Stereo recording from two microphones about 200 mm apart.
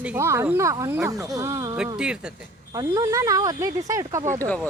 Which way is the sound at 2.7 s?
15° right (ahead or behind).